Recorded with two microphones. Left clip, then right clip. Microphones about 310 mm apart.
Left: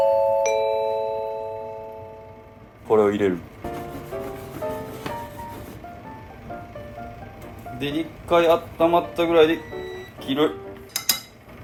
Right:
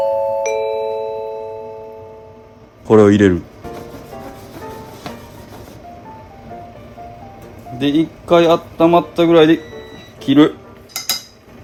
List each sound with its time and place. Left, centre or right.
0.0 s music: centre
3.1 s speech: right
7.8 s speech: right